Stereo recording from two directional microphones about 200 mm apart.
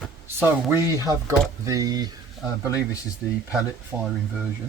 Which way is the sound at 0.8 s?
15° right (ahead or behind).